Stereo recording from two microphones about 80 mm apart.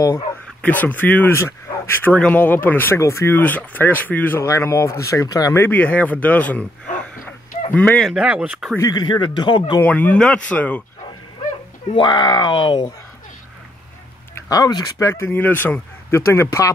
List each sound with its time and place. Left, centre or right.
0.6 s speech: centre
1.3 s speech: left
2.1 s speech: centre; by 3.3 s left
3.3 s speech: left
4.4 s speech: left
5.6 s speech: left
8.2 s speech: centre
8.9 s speech: left
9.8 s speech: centre
11.9 s speech: left
14.3 s speech: left
15.0 s speech: left
15.2 s speech: left